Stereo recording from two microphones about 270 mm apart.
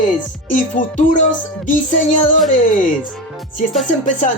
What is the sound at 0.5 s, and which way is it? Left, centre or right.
Speech, left.